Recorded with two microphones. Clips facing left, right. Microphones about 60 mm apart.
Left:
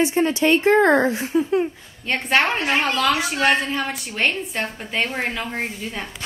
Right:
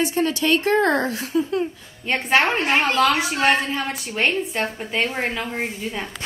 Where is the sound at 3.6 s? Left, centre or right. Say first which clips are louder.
Left 1 dB; centre.